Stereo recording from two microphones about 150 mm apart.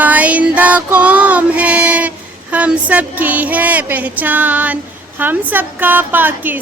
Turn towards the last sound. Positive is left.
turn(degrees=-10)  # may be behind; listen again after turning